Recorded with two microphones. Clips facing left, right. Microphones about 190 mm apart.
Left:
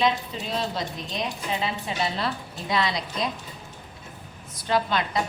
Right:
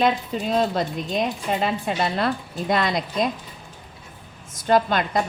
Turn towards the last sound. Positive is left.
turn(degrees=-50)  # may be behind; listen again after turning